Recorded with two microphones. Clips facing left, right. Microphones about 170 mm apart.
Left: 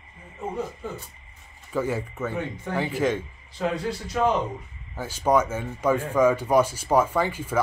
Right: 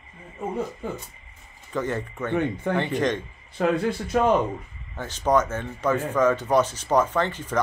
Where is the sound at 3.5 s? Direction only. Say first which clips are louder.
Right 4 dB; 55° right (ahead or behind).